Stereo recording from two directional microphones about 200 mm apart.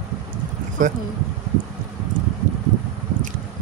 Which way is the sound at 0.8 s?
40° right (ahead or behind).